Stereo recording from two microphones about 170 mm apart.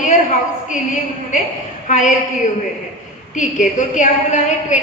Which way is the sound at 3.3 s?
45° left (ahead or behind).